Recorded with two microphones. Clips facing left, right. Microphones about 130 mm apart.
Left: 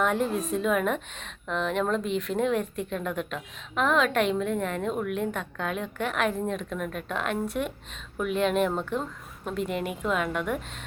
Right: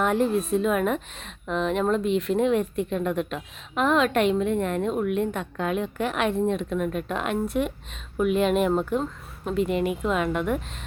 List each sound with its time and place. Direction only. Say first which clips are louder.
0.0 s a woman's voice: right 3 dB; centre (ahead or behind)